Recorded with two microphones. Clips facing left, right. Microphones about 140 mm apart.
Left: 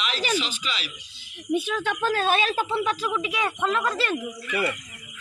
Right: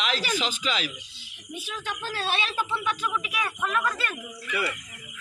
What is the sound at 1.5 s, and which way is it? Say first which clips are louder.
Speech: left 10 dB; 65° left (ahead or behind).